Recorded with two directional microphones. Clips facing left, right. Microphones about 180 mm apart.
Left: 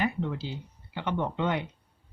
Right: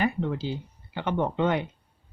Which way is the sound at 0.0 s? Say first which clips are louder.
Right 3 dB; 45° right (ahead or behind).